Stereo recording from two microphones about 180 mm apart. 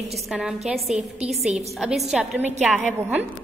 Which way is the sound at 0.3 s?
5° right (ahead or behind).